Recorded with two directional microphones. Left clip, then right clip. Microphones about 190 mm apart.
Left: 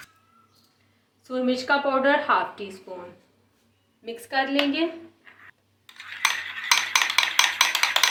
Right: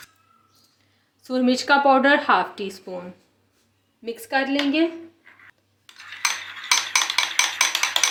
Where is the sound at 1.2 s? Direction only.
65° right (ahead or behind).